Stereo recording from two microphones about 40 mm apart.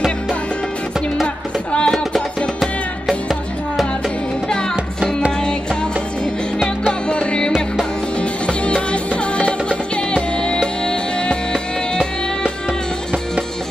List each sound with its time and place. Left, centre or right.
1.2 s music: left
1.9 s music: centre
6.9 s music: left